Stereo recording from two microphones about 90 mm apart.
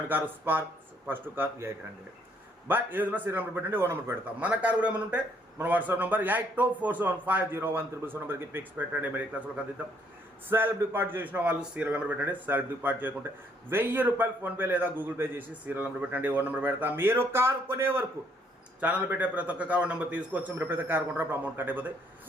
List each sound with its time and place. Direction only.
0.1 s a man's voice: 20° right (ahead or behind)
18.8 s a man's voice: 15° right (ahead or behind)